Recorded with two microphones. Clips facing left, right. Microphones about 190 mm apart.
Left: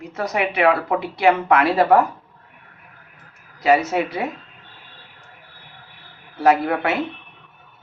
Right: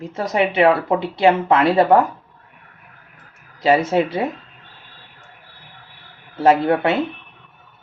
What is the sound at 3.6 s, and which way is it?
Speech, 30° right (ahead or behind).